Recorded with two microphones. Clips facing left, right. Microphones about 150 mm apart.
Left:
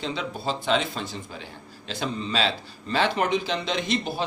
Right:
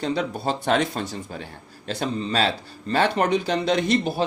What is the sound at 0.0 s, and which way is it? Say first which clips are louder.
A man's voice: right 5 dB; 45° right (ahead or behind).